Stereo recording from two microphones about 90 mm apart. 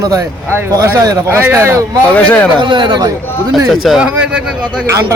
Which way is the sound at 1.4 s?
25° right (ahead or behind).